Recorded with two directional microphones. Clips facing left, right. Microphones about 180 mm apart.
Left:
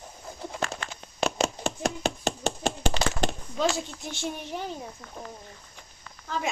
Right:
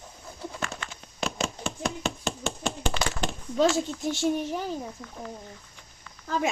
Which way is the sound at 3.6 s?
45° right (ahead or behind).